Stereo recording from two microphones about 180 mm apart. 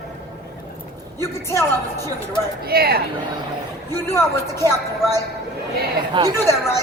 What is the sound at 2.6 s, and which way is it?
Speech, 60° right (ahead or behind).